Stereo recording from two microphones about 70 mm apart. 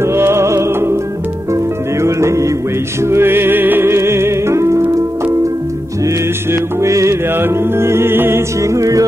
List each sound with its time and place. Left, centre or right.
0.0 s music: right
6.8 s music: right
7.3 s music: right